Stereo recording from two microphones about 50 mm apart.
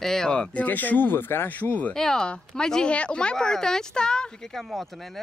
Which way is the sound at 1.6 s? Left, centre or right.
Left.